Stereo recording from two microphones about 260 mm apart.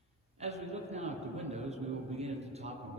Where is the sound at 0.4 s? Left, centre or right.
Right.